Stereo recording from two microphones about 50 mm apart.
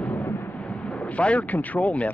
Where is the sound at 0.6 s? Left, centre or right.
Left.